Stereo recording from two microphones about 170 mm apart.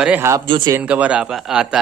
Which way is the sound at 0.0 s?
10° right (ahead or behind).